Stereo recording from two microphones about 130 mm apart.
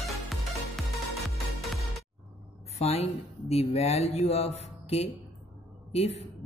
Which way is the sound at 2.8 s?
55° left (ahead or behind).